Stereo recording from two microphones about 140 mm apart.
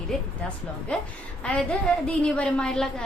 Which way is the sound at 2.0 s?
5° left (ahead or behind).